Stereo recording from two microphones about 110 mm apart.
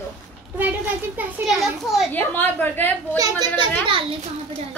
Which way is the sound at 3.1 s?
30° right (ahead or behind).